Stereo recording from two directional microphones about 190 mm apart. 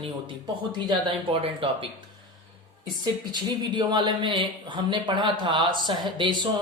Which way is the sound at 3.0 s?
25° right (ahead or behind).